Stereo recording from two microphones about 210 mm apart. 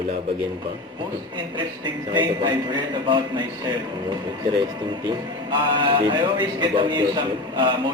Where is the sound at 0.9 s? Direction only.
20° right (ahead or behind).